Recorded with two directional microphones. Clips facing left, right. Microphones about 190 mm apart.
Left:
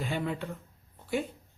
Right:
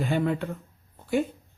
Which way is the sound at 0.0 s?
50° right (ahead or behind).